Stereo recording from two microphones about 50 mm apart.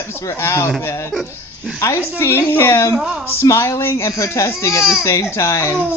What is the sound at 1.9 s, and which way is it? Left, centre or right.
A woman's voice, left.